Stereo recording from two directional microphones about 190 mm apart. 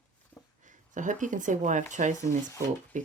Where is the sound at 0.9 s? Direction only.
40° right (ahead or behind).